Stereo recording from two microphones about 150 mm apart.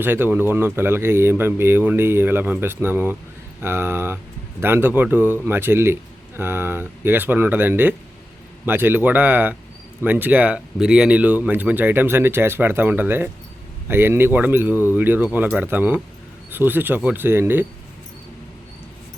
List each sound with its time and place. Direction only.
0.0 s a man's voice: 15° right (ahead or behind)